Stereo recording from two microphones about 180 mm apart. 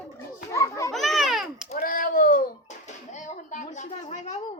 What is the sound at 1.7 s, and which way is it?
Speech, 50° left (ahead or behind).